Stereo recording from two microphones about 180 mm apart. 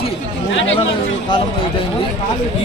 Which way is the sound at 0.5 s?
90° left.